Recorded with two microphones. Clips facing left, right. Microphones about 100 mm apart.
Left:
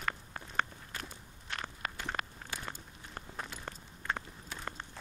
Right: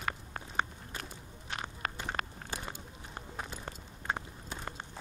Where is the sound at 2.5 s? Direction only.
30° right (ahead or behind).